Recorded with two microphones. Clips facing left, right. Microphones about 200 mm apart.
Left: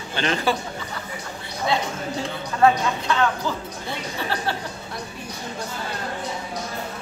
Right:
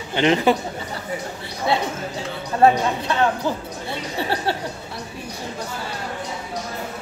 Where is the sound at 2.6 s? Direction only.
30° right (ahead or behind).